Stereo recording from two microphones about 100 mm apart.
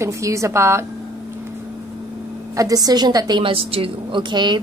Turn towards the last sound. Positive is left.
turn(degrees=-50)  # may be behind; listen again after turning